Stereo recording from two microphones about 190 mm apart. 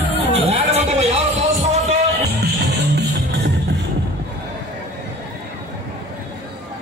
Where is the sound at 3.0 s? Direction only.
65° right (ahead or behind).